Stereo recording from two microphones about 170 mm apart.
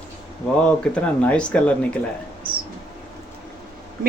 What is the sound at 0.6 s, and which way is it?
Speech, 5° left (ahead or behind).